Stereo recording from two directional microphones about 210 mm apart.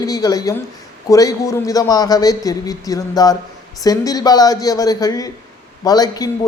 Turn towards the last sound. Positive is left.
turn(degrees=20)  # may be behind; listen again after turning